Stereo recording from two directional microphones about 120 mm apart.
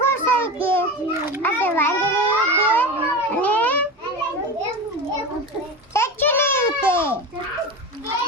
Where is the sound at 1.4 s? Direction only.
15° left (ahead or behind).